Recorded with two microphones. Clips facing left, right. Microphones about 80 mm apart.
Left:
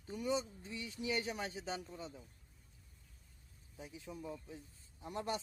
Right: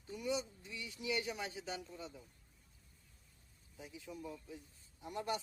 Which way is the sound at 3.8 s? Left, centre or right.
Left.